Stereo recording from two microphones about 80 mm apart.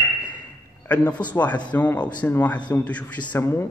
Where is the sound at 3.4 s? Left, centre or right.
Left.